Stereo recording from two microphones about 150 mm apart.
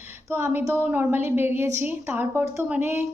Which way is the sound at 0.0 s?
15° right (ahead or behind).